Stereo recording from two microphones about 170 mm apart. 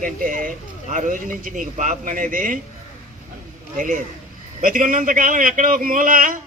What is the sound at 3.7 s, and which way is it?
A man's voice, 50° right (ahead or behind).